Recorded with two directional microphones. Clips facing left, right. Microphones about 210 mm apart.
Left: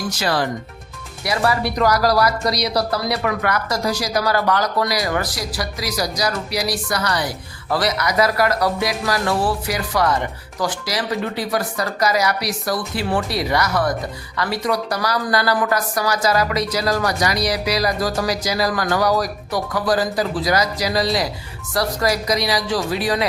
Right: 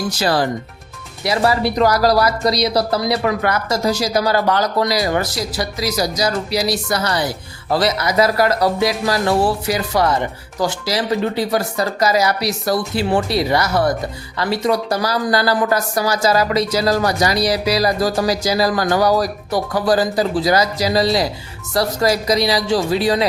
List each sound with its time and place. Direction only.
0.2 s speech: 35° right (ahead or behind)